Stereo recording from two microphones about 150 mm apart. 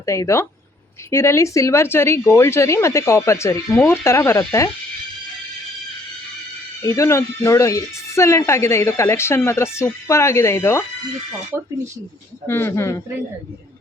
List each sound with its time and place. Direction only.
0.0 s speech: 20° left (ahead or behind)
6.8 s speech: 20° left (ahead or behind)
11.5 s speech: 15° right (ahead or behind)
12.5 s speech: 15° left (ahead or behind)